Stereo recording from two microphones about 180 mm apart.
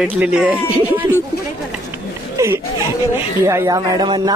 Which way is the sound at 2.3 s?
15° right (ahead or behind).